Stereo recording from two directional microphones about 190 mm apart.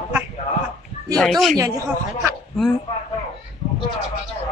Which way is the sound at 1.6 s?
15° right (ahead or behind).